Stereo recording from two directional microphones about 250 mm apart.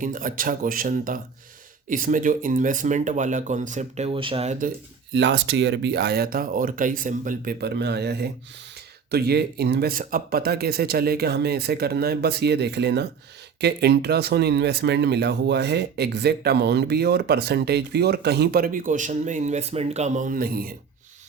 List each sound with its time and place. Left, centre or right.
0.0 s speech: right
5.1 s speech: right